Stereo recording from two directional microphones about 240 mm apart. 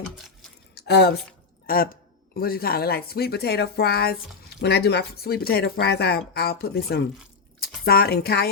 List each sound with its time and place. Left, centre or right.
0.8 s speech: left